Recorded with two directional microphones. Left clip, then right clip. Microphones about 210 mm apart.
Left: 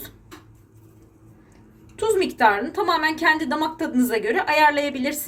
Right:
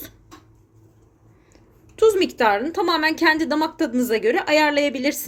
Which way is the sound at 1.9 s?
50° right (ahead or behind).